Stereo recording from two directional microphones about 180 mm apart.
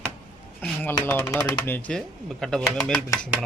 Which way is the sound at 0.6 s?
10° left (ahead or behind).